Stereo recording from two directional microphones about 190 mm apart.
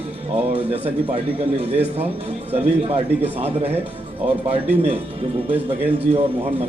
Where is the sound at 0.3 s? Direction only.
30° right (ahead or behind).